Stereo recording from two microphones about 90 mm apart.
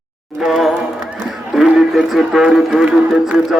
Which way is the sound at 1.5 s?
5° right (ahead or behind).